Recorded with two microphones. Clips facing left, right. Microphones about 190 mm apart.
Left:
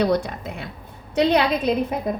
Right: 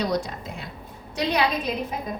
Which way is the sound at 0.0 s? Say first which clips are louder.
Left 5 dB; 60° left (ahead or behind).